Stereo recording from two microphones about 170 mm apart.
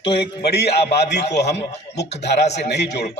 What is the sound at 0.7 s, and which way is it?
Speech, 35° left (ahead or behind).